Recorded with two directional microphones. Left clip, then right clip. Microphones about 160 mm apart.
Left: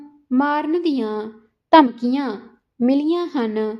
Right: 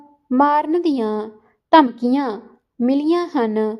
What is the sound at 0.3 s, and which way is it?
A woman's voice, 35° right (ahead or behind).